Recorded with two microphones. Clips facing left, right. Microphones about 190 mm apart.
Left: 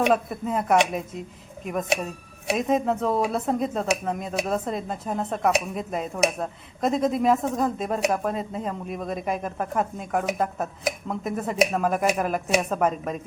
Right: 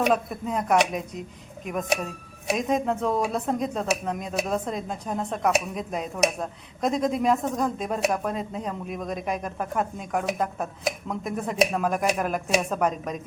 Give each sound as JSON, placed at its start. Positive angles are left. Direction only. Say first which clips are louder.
{"t": 0.0, "sound": "speech", "louder": "left 1 dB", "side_deg": 0}
{"t": 2.5, "sound": "speech", "louder": "left 2 dB", "side_deg": 0}